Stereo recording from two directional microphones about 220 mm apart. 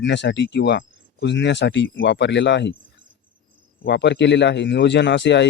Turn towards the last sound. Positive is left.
turn(degrees=50)  # may be behind; listen again after turning